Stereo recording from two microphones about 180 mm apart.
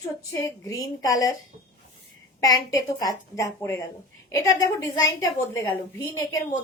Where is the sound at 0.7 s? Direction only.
20° left (ahead or behind).